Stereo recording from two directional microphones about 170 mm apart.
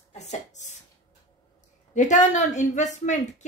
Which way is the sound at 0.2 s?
45° left (ahead or behind).